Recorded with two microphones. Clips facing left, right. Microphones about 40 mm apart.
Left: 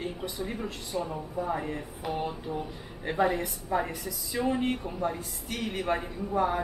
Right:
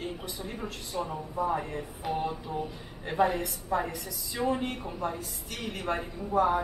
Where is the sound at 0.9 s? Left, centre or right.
Centre.